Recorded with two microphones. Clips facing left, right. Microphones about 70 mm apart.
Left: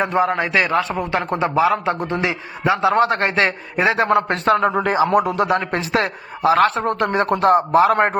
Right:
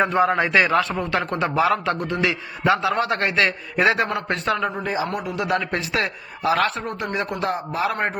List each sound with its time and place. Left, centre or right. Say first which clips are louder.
0.2 s a man's voice: left 1 dB; centre
0.8 s a man's voice: left 2 dB; centre
4.7 s a man's voice: left 7 dB; left
4.9 s speech: left 9 dB; left
5.5 s a man's voice: left 4 dB; left
6.8 s speech: left 8 dB; left